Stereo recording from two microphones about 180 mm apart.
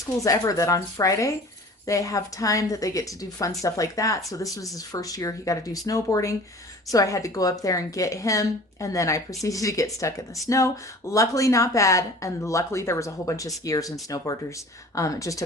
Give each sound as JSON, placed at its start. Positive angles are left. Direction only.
{"t": 0.0, "sound": "a woman's voice", "side_deg": 20}